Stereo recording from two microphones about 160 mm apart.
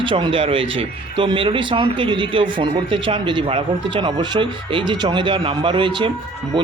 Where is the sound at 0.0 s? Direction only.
30° right (ahead or behind).